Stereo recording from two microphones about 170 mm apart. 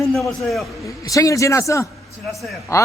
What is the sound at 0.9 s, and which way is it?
A man's voice, 20° left (ahead or behind).